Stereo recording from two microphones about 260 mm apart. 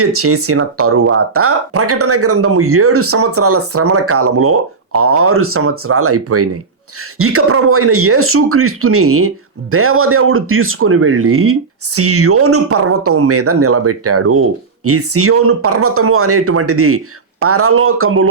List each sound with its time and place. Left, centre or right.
0.0 s speech: right